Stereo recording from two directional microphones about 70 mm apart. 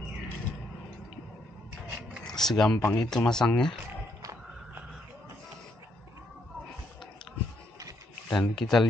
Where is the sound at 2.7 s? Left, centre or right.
Left.